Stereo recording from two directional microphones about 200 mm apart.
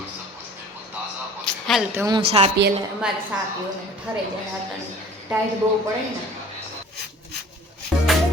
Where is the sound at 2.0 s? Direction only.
20° right (ahead or behind).